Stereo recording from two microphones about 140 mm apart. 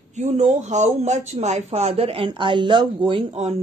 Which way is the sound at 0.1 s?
55° right (ahead or behind).